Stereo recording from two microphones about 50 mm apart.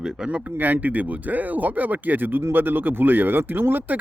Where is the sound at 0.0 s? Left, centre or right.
Centre.